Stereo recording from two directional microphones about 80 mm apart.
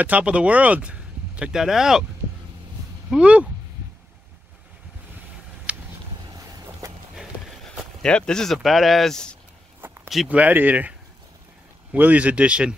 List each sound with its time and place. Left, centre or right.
0.0 s speech: centre
3.1 s speech: centre
5.7 s a sound: centre
6.8 s a sound: right
8.0 s speech: centre
10.2 s speech: centre